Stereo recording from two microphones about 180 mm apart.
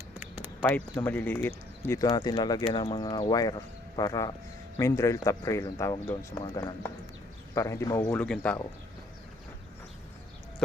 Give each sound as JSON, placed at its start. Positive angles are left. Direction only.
{"t": 0.1, "sound": "a sound", "side_deg": -10}
{"t": 1.0, "sound": "speech", "side_deg": 10}
{"t": 8.1, "sound": "speech", "side_deg": 5}